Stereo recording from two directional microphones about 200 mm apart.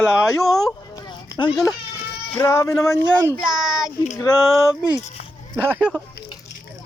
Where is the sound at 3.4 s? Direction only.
Centre (ahead or behind).